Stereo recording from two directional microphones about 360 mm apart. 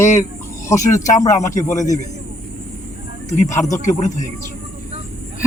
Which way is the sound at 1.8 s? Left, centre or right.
Centre.